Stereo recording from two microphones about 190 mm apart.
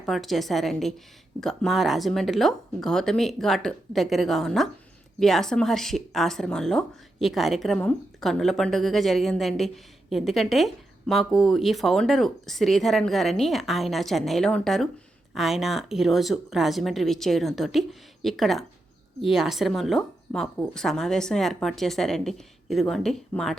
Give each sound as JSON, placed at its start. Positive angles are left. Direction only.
{"t": 0.0, "sound": "speech", "side_deg": 0}